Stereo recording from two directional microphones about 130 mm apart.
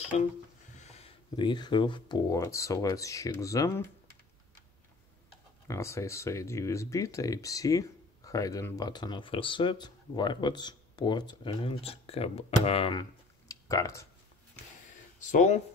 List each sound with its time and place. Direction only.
0.1 s music: 60° left (ahead or behind)
0.7 s a sound: 55° left (ahead or behind)
1.3 s speech: 35° left (ahead or behind); by 3.9 s 20° left (ahead or behind)
5.7 s speech: 20° left (ahead or behind); by 12.9 s 50° left (ahead or behind)
13.5 s a sound: 25° left (ahead or behind)
15.1 s speech: 70° left (ahead or behind)